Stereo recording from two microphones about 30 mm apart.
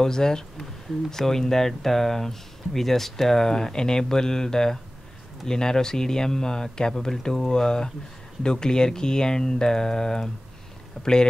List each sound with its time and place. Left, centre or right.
0.0 s speech: left